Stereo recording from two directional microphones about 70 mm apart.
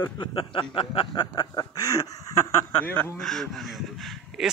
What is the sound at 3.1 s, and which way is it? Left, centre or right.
Speech, centre.